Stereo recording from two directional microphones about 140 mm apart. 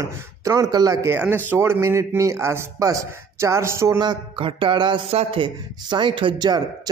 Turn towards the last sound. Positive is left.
turn(degrees=-30)  # may be behind; listen again after turning